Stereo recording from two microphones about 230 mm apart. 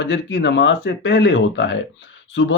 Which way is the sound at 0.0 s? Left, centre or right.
Left.